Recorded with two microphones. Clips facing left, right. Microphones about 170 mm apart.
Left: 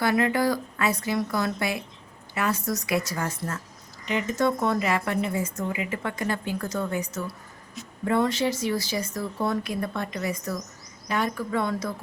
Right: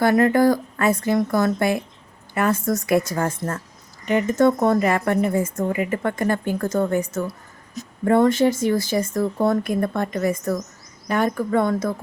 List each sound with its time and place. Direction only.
0.0 s speech: 45° right (ahead or behind)